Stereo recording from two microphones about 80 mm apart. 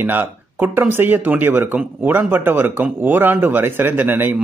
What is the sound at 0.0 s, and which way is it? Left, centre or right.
Speech, right.